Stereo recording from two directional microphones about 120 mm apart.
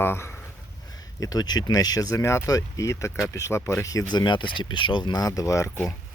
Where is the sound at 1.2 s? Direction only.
30° left (ahead or behind).